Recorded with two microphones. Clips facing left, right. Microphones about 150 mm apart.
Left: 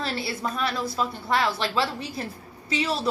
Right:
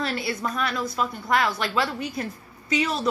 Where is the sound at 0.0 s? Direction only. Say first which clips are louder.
Right 2 dB; 30° left (ahead or behind).